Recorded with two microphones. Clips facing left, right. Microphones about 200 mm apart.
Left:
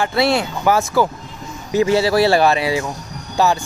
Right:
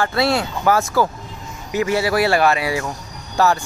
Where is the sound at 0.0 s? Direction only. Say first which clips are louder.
Left 2 dB; 20° left (ahead or behind).